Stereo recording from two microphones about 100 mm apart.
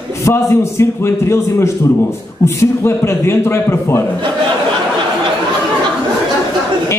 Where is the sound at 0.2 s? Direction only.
30° left (ahead or behind).